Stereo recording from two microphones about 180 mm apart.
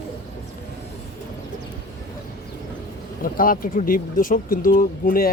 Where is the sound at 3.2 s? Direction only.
50° left (ahead or behind).